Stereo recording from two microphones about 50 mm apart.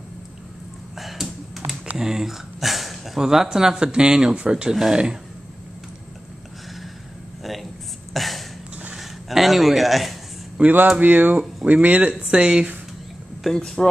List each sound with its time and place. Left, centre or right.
0.9 s computer keyboard: centre
2.0 s speech: centre
3.2 s speech: centre
8.1 s a sound: centre
10.6 s speech: right
13.6 s speech: centre